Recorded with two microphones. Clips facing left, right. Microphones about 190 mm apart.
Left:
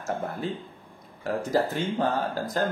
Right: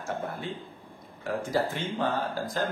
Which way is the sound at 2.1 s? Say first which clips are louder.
Left 3 dB; 40° left (ahead or behind).